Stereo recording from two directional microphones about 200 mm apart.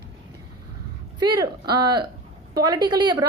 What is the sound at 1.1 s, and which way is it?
A woman's voice, 20° right (ahead or behind).